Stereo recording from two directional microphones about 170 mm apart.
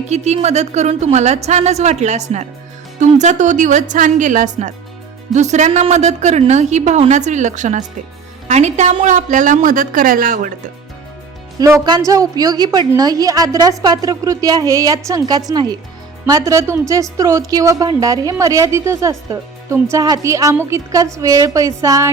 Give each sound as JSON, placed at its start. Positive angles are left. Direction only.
{"t": 0.1, "sound": "a woman's voice", "side_deg": -40}
{"t": 11.6, "sound": "a woman's voice", "side_deg": -20}